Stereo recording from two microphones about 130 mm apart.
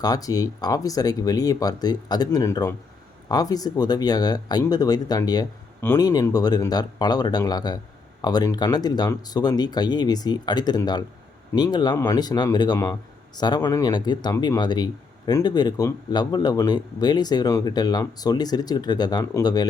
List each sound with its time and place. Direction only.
0.0 s speech: 30° left (ahead or behind)